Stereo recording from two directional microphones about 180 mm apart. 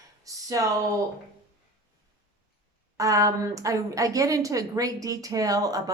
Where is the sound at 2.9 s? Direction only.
20° right (ahead or behind).